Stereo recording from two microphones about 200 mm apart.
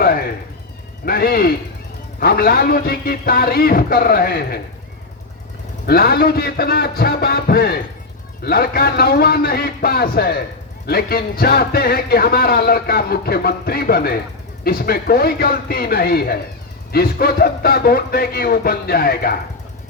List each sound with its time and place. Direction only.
0.0 s cat: 50° left (ahead or behind)
1.0 s speech: 50° left (ahead or behind)
5.8 s speech: 50° left (ahead or behind)